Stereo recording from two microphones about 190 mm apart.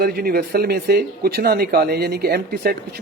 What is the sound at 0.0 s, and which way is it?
Speech, 50° right (ahead or behind).